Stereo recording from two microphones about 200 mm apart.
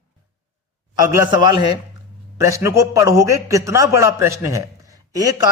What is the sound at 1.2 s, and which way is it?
Speech, 20° right (ahead or behind).